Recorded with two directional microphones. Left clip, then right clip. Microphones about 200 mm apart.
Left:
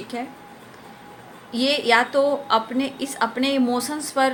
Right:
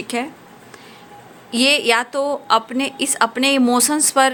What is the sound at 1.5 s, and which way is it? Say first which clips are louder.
A woman's voice: right 3 dB; 40° right (ahead or behind).